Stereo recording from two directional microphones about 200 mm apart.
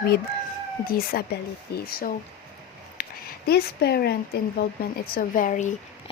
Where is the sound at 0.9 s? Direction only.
50° left (ahead or behind).